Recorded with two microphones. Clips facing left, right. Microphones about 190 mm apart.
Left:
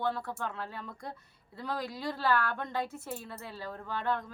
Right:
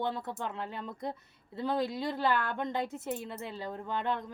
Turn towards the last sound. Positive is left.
turn(degrees=-20)  # may be behind; listen again after turning